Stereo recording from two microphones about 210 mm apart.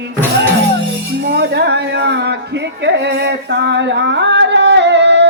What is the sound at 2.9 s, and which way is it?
Singing, 55° right (ahead or behind).